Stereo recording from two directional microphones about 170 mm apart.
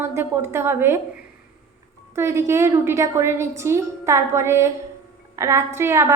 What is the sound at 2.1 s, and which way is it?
A woman's voice, 15° right (ahead or behind).